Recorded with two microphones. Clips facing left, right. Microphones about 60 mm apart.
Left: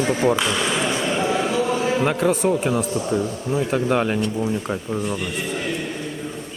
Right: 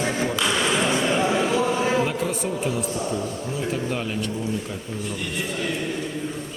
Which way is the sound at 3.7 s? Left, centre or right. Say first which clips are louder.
Left 9 dB; left.